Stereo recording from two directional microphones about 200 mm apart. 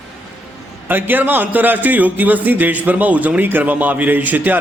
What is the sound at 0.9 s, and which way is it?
A man's voice, 10° right (ahead or behind).